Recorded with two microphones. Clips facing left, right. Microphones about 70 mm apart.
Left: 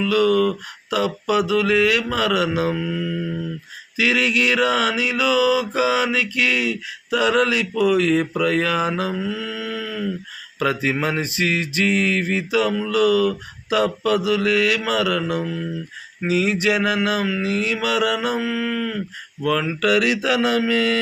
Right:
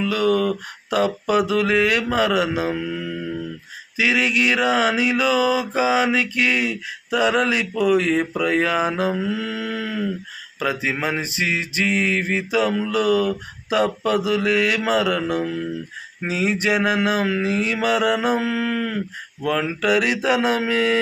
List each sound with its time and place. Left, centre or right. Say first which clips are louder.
0.0 s mantra: left 2 dB; right
3.9 s mantra: even; right
9.4 s mantra: right 1 dB; right
10.6 s mantra: left 2 dB; centre; by 18.3 s right
18.3 s mantra: right 1 dB; right
19.5 s mantra: left 1 dB; right